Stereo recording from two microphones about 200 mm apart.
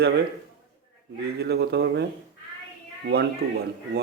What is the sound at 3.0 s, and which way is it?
Speech, 55° right (ahead or behind).